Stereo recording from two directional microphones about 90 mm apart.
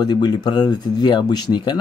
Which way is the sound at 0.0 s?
55° left (ahead or behind).